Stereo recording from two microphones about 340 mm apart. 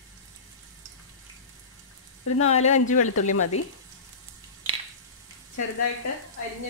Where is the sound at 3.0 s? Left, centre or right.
Left.